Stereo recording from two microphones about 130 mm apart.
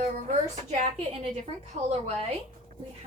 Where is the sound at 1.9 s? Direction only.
55° right (ahead or behind).